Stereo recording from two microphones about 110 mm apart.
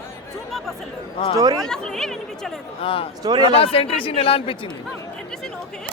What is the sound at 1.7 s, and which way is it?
Speech, 5° left (ahead or behind).